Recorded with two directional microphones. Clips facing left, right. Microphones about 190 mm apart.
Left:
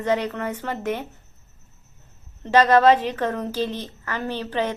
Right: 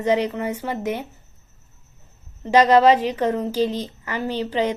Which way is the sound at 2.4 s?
10° right (ahead or behind).